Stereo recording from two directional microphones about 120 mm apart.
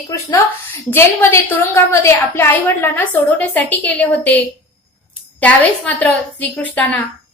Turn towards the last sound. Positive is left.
turn(degrees=10)  # may be behind; listen again after turning